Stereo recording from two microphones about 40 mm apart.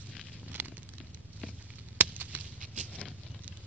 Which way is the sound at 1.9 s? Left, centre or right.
Right.